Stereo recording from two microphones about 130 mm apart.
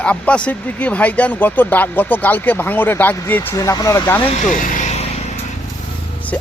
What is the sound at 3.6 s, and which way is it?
Speech, 25° left (ahead or behind).